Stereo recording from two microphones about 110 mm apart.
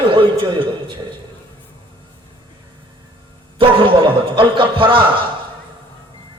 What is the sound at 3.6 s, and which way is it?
A man's voice, 50° right (ahead or behind).